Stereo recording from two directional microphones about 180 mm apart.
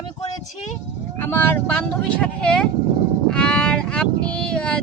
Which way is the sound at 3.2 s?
5° left (ahead or behind).